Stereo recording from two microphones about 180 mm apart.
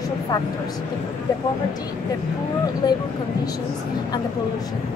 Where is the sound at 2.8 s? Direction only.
20° left (ahead or behind).